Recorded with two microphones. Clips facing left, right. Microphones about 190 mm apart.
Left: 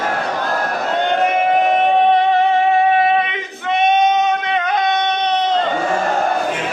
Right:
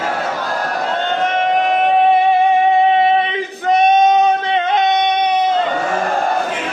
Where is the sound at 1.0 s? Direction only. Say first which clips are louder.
Left 3 dB; 10° left (ahead or behind); by 5.6 s 10° right (ahead or behind).